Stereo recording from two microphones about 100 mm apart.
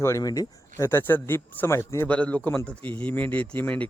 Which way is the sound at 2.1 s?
15° left (ahead or behind).